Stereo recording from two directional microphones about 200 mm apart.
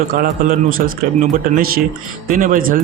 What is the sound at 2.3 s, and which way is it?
Speech, 40° right (ahead or behind).